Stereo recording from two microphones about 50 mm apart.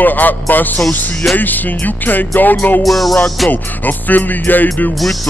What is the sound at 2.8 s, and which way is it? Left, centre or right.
Music, centre.